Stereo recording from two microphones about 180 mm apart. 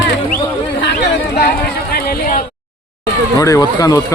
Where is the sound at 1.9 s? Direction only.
55° left (ahead or behind).